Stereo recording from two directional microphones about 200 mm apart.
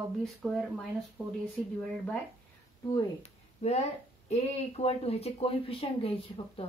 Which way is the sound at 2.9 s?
30° left (ahead or behind).